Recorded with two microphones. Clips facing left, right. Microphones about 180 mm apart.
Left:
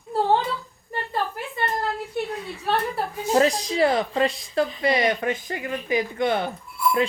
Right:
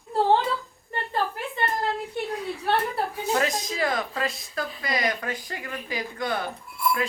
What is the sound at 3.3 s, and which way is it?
Speech, 35° left (ahead or behind).